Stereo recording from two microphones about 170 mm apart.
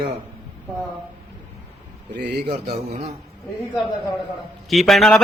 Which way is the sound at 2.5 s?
40° right (ahead or behind).